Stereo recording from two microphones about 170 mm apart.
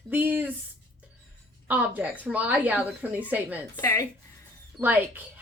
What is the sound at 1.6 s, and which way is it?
A woman's voice, 10° right (ahead or behind).